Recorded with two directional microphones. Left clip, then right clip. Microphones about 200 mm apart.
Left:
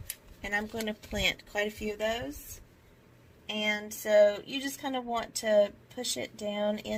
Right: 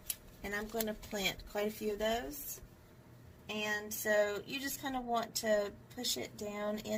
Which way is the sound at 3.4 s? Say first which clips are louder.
Left 6 dB; 45° left (ahead or behind).